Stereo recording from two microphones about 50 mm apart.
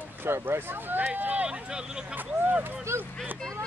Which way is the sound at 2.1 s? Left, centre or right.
Right.